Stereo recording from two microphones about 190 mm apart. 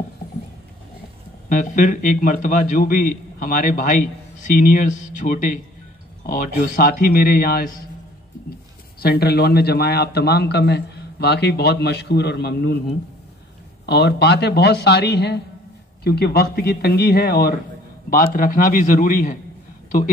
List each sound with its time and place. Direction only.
1.5 s a man's voice: 40° left (ahead or behind)
9.0 s a man's voice: 55° left (ahead or behind)
13.8 s a man's voice: 60° left (ahead or behind); by 19.3 s 45° left (ahead or behind)